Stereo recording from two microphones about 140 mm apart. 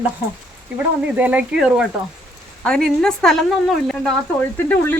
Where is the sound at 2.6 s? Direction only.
5° left (ahead or behind).